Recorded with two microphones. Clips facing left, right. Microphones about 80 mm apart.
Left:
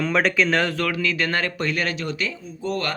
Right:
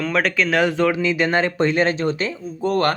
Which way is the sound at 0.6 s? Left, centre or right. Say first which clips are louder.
Right 6 dB; right.